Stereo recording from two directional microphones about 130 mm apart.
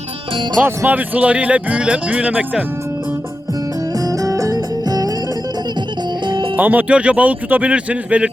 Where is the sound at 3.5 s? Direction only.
25° right (ahead or behind).